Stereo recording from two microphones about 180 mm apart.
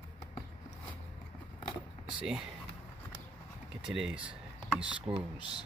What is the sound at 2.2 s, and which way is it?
Speech, 5° right (ahead or behind).